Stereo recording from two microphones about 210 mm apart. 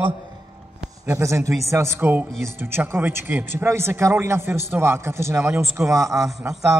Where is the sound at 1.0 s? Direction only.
15° right (ahead or behind).